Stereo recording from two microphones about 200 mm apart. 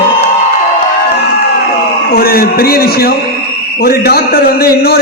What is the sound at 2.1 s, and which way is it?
A man's voice, 50° left (ahead or behind).